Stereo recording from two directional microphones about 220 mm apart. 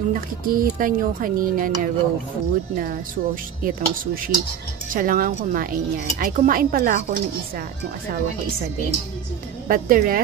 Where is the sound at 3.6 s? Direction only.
40° right (ahead or behind).